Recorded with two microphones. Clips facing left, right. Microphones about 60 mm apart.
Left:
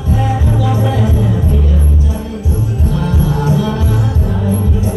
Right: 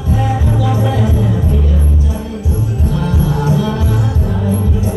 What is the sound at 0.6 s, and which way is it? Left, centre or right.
Music, left.